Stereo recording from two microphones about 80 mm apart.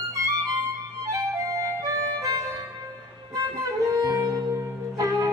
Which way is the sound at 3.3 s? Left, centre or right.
Right.